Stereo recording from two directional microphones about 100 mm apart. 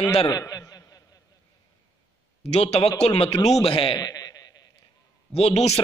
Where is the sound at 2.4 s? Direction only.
90° left.